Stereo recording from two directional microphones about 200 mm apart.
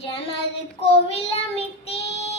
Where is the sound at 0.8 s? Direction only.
30° left (ahead or behind).